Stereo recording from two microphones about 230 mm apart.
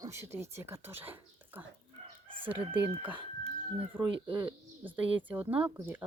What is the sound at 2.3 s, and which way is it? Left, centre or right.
Chicken, right.